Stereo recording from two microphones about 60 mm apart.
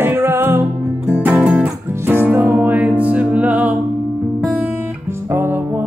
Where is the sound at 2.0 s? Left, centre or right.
Right.